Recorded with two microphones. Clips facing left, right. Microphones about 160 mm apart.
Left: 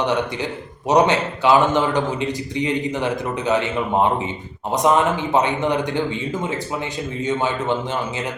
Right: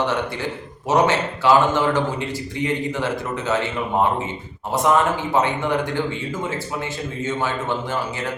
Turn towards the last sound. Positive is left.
turn(degrees=20)  # may be behind; listen again after turning